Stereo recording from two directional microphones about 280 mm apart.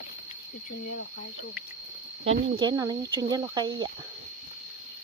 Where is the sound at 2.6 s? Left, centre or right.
Centre.